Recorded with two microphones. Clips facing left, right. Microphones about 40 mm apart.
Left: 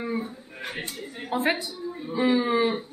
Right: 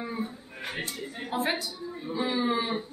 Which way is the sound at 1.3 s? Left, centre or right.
Left.